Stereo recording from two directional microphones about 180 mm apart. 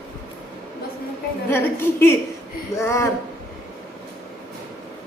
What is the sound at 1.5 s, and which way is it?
A man's voice, 15° left (ahead or behind).